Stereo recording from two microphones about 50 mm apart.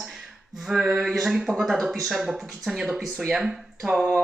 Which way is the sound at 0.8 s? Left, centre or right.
Right.